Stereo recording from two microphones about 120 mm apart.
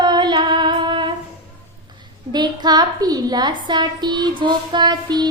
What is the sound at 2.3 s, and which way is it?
A woman's voice, 35° right (ahead or behind).